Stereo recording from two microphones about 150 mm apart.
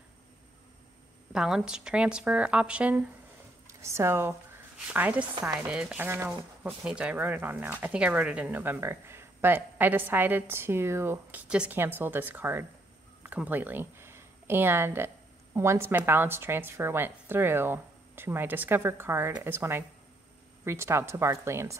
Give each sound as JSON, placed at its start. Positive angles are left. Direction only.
{"t": 1.3, "sound": "speech", "side_deg": -5}
{"t": 3.6, "sound": "speech", "side_deg": -20}